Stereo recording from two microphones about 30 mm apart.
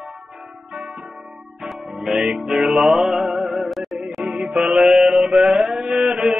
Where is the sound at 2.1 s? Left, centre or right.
Right.